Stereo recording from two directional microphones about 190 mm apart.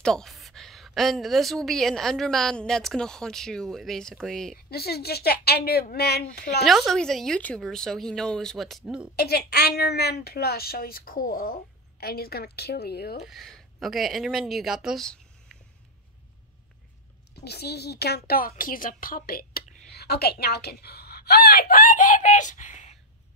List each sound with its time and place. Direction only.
0.0 s a woman's voice: centre (ahead or behind)
4.6 s a woman's voice: 55° left (ahead or behind)
6.6 s a woman's voice: centre (ahead or behind)
9.1 s a woman's voice: 55° left (ahead or behind)
13.2 s speech: centre (ahead or behind)
17.5 s a woman's voice: 60° left (ahead or behind); by 22.9 s 40° left (ahead or behind)